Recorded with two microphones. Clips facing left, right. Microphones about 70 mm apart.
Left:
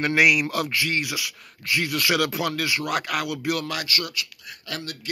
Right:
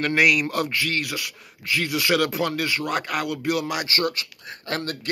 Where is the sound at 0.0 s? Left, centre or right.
Centre.